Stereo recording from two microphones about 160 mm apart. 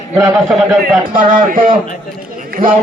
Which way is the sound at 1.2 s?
60° right (ahead or behind).